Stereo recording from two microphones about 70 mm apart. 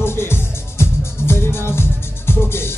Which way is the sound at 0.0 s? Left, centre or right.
Left.